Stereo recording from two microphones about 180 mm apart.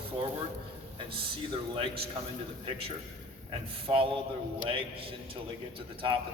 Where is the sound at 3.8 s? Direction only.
30° right (ahead or behind).